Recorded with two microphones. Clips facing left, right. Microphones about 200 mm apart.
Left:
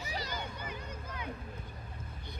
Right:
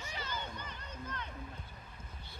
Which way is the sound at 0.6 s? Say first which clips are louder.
Left 4 dB; 10° left (ahead or behind).